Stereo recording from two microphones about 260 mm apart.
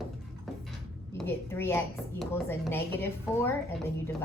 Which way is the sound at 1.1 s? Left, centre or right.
Centre.